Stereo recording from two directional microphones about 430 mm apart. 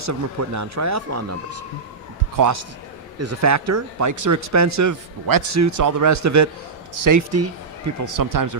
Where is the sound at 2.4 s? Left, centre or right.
Right.